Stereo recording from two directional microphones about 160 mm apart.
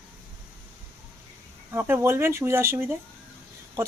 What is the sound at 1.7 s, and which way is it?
A woman's voice, 15° right (ahead or behind).